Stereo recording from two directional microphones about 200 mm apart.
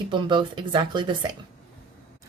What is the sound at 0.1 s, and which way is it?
A woman's voice, 25° right (ahead or behind).